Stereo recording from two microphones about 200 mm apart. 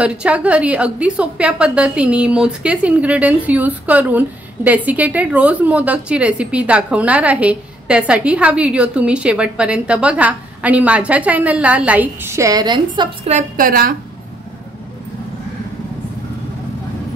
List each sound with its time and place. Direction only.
0.0 s a woman's voice: 5° right (ahead or behind); by 13.3 s 25° right (ahead or behind)
13.3 s a woman's voice: 40° right (ahead or behind)